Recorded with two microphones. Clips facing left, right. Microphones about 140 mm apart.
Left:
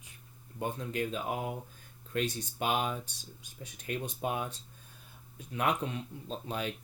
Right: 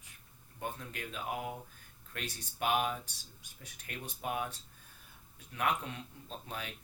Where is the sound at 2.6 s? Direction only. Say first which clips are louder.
Even; 25° left (ahead or behind).